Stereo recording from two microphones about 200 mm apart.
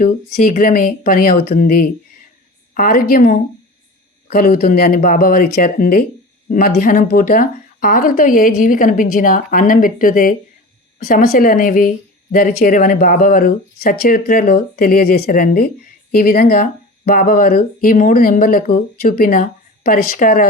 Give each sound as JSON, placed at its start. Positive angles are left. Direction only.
{"t": 0.0, "sound": "speech", "side_deg": 45}